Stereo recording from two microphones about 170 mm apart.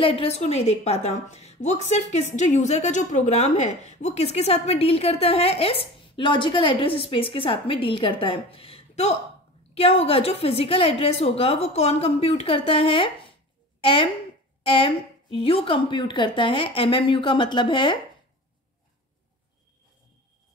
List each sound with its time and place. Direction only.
0.0 s a woman's voice: 35° left (ahead or behind)
14.6 s a woman's voice: 30° left (ahead or behind)